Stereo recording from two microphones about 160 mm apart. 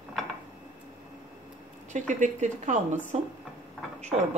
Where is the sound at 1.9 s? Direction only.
50° right (ahead or behind).